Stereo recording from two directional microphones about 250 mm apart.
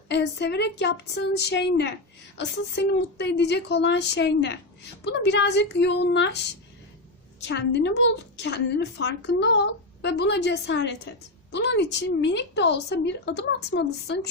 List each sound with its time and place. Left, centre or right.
0.1 s a woman's voice: left
7.4 s a woman's voice: left